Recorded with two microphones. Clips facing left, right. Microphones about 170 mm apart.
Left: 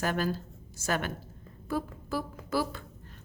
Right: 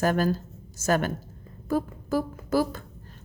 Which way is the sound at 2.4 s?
45° right (ahead or behind).